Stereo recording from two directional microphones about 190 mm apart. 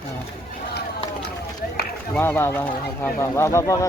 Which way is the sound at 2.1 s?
10° left (ahead or behind).